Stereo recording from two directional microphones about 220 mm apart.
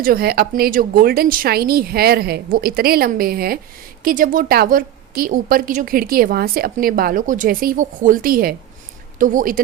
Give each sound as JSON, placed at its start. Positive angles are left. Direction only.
{"t": 0.0, "sound": "a woman's voice", "side_deg": -40}